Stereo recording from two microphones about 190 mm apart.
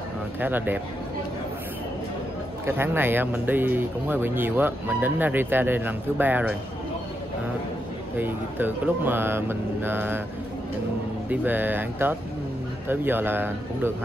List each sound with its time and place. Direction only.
0.4 s speech: 10° right (ahead or behind)
2.6 s speech: 10° right (ahead or behind)
8.2 s speech: 10° right (ahead or behind)
11.2 s speech: 10° right (ahead or behind)